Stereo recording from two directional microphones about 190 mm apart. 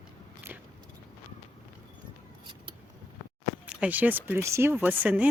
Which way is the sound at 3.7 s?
5° right (ahead or behind).